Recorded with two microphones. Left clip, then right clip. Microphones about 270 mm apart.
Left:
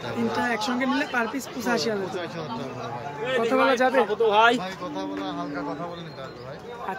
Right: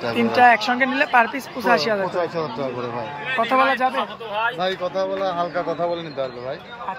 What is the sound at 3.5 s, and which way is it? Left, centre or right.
Speech, centre.